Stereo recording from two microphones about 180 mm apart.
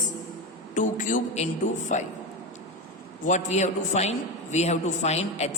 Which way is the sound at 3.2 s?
45° left (ahead or behind).